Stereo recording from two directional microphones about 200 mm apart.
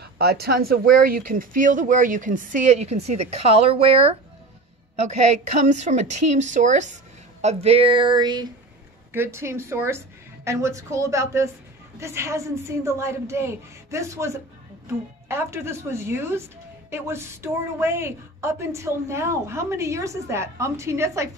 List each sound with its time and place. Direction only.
0.0 s speech: 55° right (ahead or behind); by 7.0 s 35° right (ahead or behind)
7.4 s a sound: 30° right (ahead or behind)
9.1 s a woman's voice: 10° right (ahead or behind)